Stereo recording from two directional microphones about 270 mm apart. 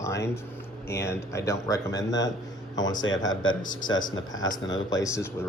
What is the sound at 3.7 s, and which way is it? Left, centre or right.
Speech, centre.